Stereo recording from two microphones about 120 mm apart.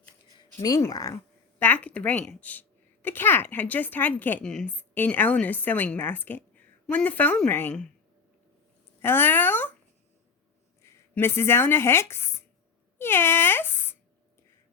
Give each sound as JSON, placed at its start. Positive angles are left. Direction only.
{"t": 0.5, "sound": "speech", "side_deg": 25}
{"t": 1.5, "sound": "a woman's voice", "side_deg": 15}
{"t": 9.0, "sound": "a sound", "side_deg": 15}
{"t": 10.8, "sound": "speech", "side_deg": 20}